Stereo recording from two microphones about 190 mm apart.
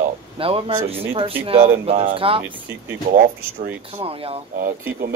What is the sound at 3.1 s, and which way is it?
Speech, 50° right (ahead or behind).